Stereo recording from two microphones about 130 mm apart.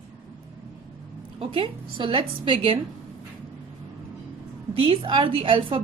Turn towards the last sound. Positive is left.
turn(degrees=-40)  # may be behind; listen again after turning